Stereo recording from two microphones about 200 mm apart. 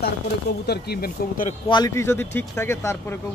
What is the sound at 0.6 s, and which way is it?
Speech, 55° left (ahead or behind).